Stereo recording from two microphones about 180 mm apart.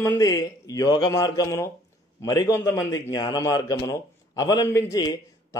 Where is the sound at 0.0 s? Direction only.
20° left (ahead or behind).